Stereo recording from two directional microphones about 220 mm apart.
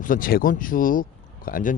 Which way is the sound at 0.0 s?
40° left (ahead or behind).